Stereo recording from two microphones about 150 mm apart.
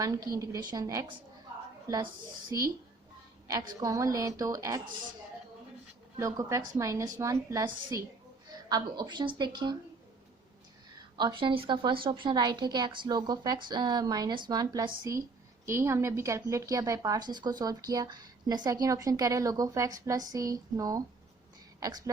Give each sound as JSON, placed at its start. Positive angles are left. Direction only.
{"t": 0.0, "sound": "speech", "side_deg": -25}
{"t": 3.4, "sound": "speech", "side_deg": -25}
{"t": 6.1, "sound": "speech", "side_deg": -20}
{"t": 11.2, "sound": "speech", "side_deg": -30}